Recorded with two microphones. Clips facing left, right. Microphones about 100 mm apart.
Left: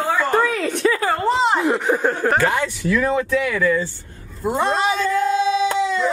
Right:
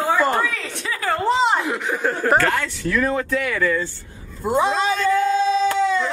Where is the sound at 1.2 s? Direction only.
Centre (ahead or behind).